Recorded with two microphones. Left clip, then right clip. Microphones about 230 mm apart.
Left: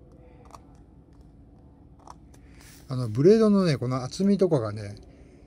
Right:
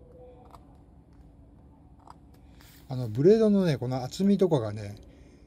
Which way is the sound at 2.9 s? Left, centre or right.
Centre.